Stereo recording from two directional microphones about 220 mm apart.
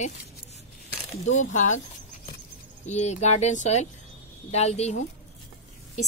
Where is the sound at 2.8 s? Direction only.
30° left (ahead or behind).